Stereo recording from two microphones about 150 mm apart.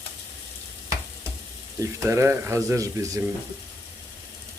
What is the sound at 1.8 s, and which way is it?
Speech, 20° right (ahead or behind).